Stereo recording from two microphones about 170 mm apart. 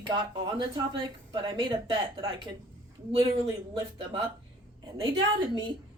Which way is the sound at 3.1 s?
35° right (ahead or behind).